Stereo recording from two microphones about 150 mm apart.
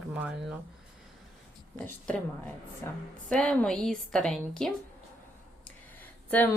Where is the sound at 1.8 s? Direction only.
10° left (ahead or behind).